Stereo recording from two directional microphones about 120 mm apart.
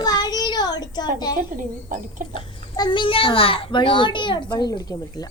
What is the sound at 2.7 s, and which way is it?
A child's voice, 40° left (ahead or behind).